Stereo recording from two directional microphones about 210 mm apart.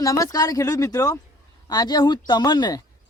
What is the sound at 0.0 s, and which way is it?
Speech, 15° left (ahead or behind).